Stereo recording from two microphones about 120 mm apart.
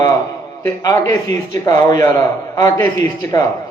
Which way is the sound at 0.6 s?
25° left (ahead or behind).